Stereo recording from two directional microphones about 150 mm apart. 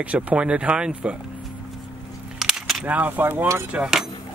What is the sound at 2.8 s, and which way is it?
Speech, 10° right (ahead or behind).